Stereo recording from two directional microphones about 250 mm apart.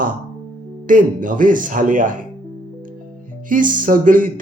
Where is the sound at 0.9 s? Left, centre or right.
Right.